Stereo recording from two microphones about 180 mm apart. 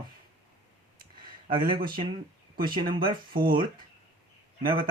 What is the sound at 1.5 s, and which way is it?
Speech, 25° right (ahead or behind).